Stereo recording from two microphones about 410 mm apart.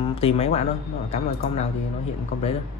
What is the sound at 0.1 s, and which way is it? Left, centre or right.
Speech, centre.